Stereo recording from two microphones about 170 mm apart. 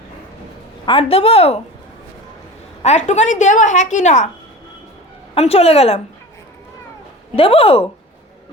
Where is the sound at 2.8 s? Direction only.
40° left (ahead or behind).